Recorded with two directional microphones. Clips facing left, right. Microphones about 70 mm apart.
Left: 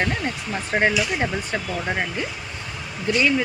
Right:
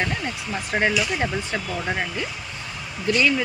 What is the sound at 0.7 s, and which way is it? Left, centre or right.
Speech, left.